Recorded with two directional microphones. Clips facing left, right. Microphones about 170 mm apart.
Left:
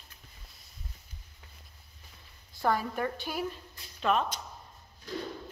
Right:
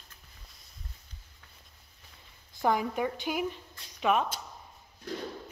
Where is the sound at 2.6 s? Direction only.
15° right (ahead or behind).